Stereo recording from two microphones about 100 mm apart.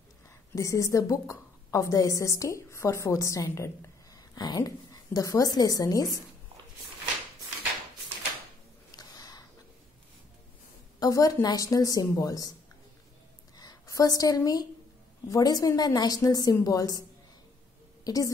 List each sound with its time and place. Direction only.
0.6 s a woman's voice: 30° left (ahead or behind)
8.9 s a sound: 40° left (ahead or behind)
11.0 s a woman's voice: 40° left (ahead or behind)
13.6 s a woman's voice: 40° left (ahead or behind)
18.0 s a woman's voice: 35° left (ahead or behind)